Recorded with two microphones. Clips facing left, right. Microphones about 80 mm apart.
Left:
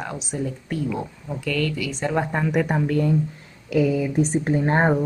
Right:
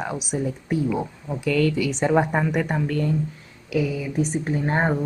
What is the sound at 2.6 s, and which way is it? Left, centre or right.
Speech, centre.